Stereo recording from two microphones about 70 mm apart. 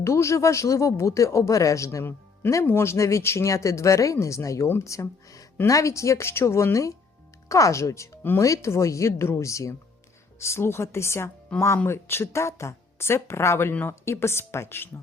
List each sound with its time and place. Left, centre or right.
0.0 s speech: left